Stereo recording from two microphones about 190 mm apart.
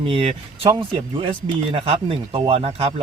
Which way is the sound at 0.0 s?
30° right (ahead or behind).